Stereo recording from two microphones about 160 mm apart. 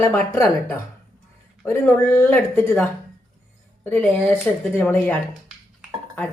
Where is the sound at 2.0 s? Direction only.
15° left (ahead or behind).